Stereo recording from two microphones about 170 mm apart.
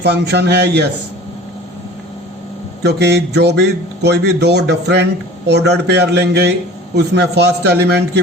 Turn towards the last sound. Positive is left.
turn(degrees=-75)  # may be behind; listen again after turning